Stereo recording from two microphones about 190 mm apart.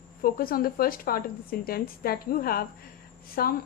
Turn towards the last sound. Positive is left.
turn(degrees=50)  # may be behind; listen again after turning